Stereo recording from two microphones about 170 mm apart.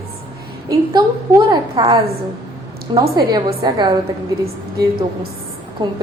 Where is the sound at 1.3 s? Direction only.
25° right (ahead or behind).